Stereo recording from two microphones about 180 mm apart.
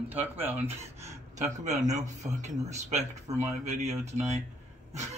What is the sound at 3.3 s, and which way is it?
Speech, 15° right (ahead or behind).